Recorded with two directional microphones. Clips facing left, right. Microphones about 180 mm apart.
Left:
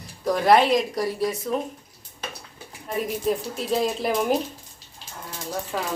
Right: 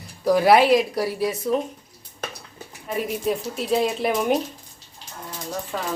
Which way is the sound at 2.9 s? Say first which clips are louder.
Even; centre (ahead or behind).